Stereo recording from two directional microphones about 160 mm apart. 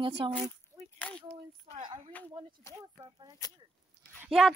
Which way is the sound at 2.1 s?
10° left (ahead or behind).